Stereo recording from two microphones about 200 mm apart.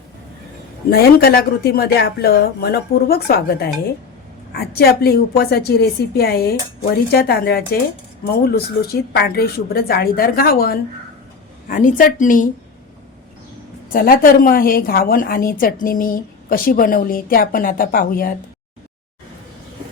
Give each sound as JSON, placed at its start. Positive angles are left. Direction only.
{"t": 0.9, "sound": "a woman's voice", "side_deg": 50}
{"t": 13.9, "sound": "a woman's voice", "side_deg": 45}